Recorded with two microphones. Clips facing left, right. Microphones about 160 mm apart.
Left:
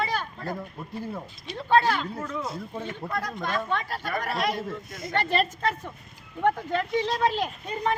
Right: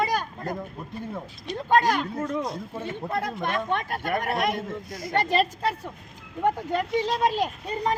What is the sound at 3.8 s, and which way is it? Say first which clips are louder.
Speech: right 3 dB; 50° right (ahead or behind).